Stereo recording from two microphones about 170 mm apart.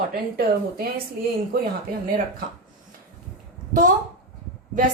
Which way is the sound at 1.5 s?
65° right (ahead or behind).